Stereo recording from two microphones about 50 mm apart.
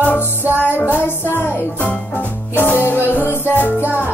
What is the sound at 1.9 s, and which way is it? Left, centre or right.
Music, left.